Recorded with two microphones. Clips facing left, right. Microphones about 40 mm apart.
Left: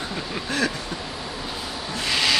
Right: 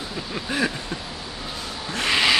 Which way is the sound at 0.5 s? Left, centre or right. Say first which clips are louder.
Even; centre.